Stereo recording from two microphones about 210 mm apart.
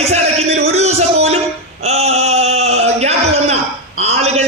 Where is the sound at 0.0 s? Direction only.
30° right (ahead or behind).